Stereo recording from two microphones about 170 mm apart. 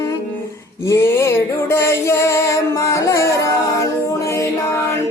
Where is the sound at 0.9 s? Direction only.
15° left (ahead or behind).